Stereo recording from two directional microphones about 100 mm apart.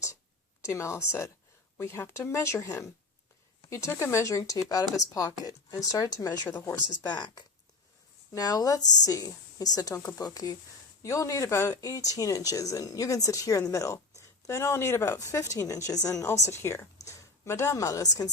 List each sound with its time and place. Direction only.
0.6 s speech: 30° left (ahead or behind)
7.1 s speech: 45° left (ahead or behind)